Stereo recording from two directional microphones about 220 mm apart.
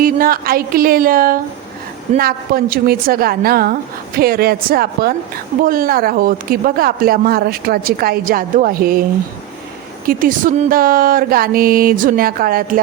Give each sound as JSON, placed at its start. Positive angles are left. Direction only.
{"t": 0.0, "sound": "a woman's voice", "side_deg": -40}
{"t": 10.1, "sound": "speech", "side_deg": -40}